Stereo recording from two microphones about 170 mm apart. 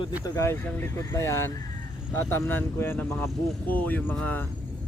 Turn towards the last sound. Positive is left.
turn(degrees=10)  # may be behind; listen again after turning